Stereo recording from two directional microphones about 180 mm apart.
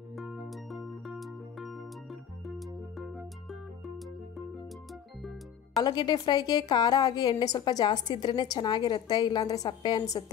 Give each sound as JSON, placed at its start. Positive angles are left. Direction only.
{"t": 0.1, "sound": "music", "side_deg": 0}
{"t": 5.8, "sound": "a woman's voice", "side_deg": 25}